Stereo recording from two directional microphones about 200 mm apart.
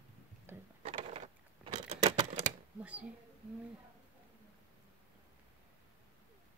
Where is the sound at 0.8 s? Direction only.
30° right (ahead or behind).